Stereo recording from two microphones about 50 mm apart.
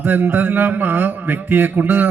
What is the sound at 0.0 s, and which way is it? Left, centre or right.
A man's voice, right.